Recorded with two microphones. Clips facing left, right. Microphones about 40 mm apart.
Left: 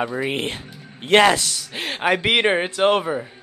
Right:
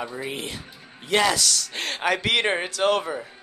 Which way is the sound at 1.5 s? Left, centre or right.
Centre.